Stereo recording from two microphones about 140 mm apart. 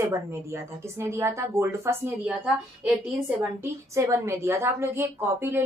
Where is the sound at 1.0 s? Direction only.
20° right (ahead or behind).